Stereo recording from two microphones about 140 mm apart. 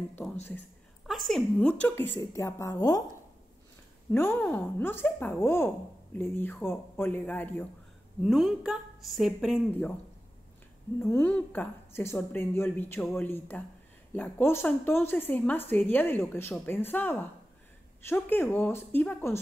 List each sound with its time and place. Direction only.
0.4 s a woman's voice: 15° left (ahead or behind)
1.0 s a woman's voice: centre (ahead or behind)
2.1 s a woman's voice: 20° left (ahead or behind)
4.1 s a woman's voice: 15° left (ahead or behind)
8.2 s a woman's voice: centre (ahead or behind)
9.7 s a woman's voice: 10° left (ahead or behind)
11.0 s a woman's voice: 15° left (ahead or behind)